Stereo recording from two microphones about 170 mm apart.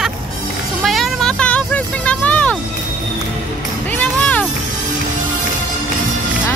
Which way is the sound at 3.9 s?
10° left (ahead or behind).